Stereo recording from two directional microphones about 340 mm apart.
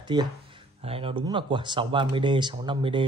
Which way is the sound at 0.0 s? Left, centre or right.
Centre.